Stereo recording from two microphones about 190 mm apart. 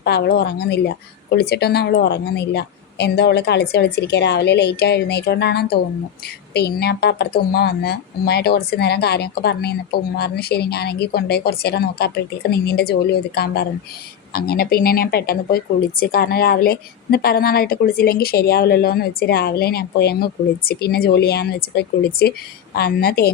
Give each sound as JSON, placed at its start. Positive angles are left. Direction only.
{"t": 0.0, "sound": "a woman's voice", "side_deg": 60}